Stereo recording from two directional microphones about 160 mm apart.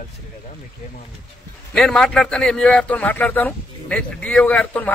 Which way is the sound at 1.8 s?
5° left (ahead or behind).